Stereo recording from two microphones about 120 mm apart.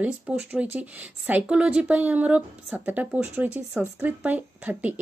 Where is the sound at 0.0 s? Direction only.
10° right (ahead or behind).